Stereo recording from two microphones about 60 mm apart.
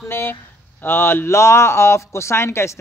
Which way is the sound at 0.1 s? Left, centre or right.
Left.